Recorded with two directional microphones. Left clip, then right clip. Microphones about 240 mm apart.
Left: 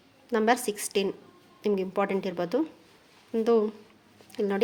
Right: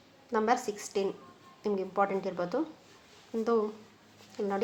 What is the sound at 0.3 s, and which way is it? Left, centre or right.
A woman's voice, left.